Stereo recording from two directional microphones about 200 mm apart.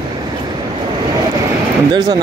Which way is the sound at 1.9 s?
20° right (ahead or behind).